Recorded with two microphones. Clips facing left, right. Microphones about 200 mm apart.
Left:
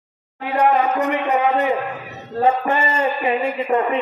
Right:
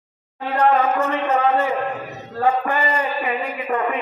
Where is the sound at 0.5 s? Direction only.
15° left (ahead or behind).